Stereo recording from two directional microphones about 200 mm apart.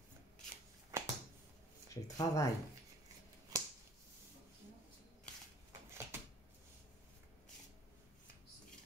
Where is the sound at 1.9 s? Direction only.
15° left (ahead or behind).